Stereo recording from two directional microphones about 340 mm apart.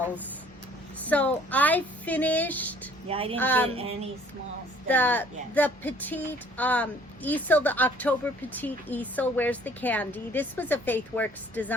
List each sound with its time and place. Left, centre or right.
1.0 s speech: centre
3.1 s speech: centre
3.3 s speech: centre
3.7 s speech: centre
4.9 s speech: centre